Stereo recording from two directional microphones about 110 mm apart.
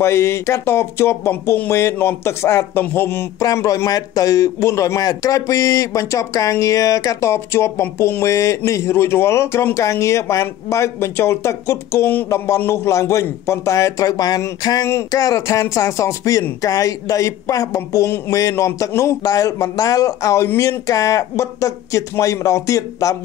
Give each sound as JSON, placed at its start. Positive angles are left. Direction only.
{"t": 0.0, "sound": "a man's voice", "side_deg": 25}
{"t": 3.3, "sound": "a man's voice", "side_deg": 30}